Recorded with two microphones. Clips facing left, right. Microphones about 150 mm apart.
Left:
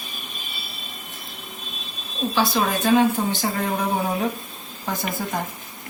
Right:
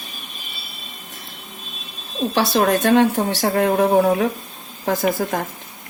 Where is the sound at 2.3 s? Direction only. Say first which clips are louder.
Right 5 dB; 80° right.